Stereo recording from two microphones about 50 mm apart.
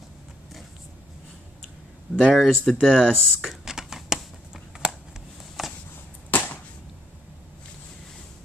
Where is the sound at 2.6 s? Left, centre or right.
Centre.